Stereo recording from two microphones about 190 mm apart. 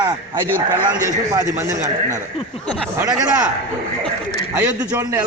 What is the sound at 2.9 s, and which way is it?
Speech, 5° right (ahead or behind).